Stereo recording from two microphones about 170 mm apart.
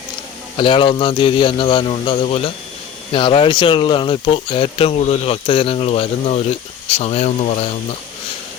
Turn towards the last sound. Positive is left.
turn(degrees=40)  # may be behind; listen again after turning